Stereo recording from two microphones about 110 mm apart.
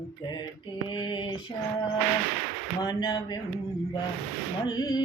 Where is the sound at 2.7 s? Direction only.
40° left (ahead or behind).